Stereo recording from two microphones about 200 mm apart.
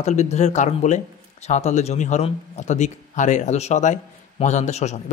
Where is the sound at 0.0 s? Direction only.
35° left (ahead or behind).